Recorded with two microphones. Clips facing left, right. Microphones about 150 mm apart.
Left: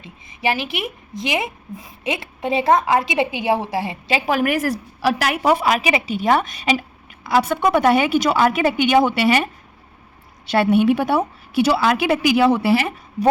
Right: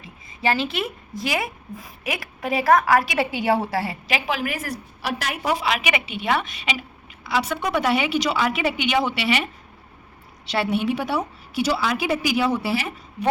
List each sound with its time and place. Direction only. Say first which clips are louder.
0.0 s a woman's voice: left 1 dB; 15° left (ahead or behind)
4.3 s a woman's voice: left 9 dB; 50° left (ahead or behind)
4.5 s a woman's voice: left 9 dB; 90° left; by 5.7 s 55° left (ahead or behind)
5.7 s a woman's voice: left 5 dB; 35° left (ahead or behind); by 12.9 s 60° left (ahead or behind)